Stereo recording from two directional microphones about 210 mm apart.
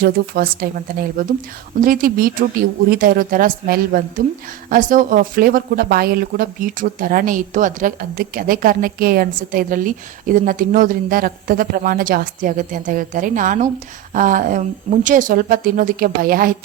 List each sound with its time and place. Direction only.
0.0 s speech: 45° right (ahead or behind)